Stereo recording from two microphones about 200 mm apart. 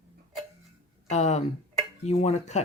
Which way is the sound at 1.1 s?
35° left (ahead or behind).